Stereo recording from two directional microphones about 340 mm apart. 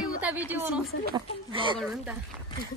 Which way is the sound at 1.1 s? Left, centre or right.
Centre.